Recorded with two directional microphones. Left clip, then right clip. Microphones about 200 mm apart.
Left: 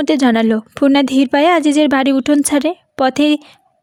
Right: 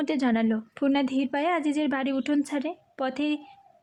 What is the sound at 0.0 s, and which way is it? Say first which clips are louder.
A woman's voice: left 13 dB; 45° left (ahead or behind).